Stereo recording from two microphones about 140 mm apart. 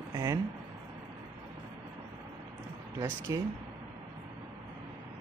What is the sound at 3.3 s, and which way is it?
Speech, 25° right (ahead or behind).